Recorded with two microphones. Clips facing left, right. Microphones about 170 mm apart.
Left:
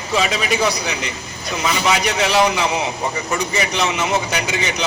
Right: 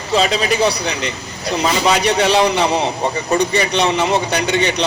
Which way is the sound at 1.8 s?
35° right (ahead or behind).